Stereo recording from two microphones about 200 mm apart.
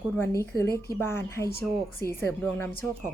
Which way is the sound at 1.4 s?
50° left (ahead or behind).